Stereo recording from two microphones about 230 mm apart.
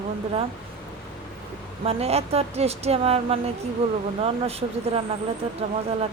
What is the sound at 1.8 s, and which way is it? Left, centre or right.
Speech, right.